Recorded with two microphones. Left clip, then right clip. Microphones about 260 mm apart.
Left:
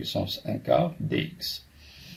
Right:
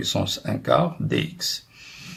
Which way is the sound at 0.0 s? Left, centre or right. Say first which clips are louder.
Right 5 dB; centre.